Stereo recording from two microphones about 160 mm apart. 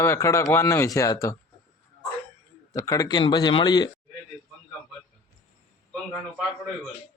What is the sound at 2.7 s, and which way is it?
A man's voice, 20° left (ahead or behind).